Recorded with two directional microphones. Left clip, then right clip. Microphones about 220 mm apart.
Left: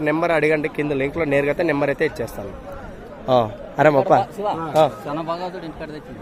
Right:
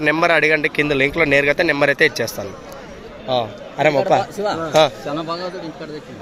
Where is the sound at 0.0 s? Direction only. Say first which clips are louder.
Right 4 dB; centre (ahead or behind).